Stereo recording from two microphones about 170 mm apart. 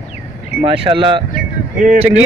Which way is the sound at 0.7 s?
30° right (ahead or behind).